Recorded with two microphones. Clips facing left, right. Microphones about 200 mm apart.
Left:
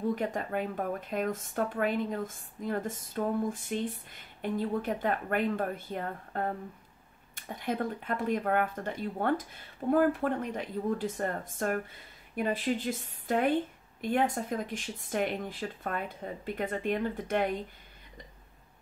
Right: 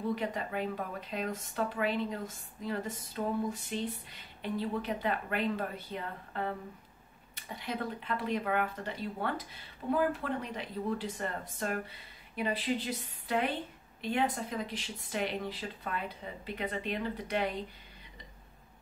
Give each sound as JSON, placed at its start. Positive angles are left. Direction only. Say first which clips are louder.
{"t": 0.1, "sound": "speech", "louder": "left 3 dB", "side_deg": 50}